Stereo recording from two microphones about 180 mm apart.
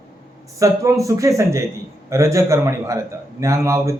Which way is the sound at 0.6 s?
15° right (ahead or behind).